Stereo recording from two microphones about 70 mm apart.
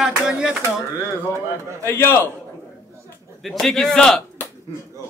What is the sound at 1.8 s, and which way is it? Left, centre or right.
Speech, left.